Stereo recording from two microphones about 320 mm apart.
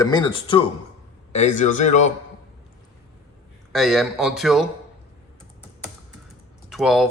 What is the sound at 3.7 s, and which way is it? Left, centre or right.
Speech, centre.